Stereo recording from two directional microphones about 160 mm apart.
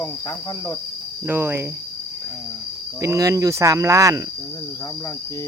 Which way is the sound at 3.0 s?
20° right (ahead or behind).